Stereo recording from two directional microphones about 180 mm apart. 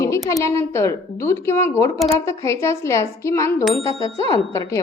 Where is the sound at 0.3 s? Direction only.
15° left (ahead or behind).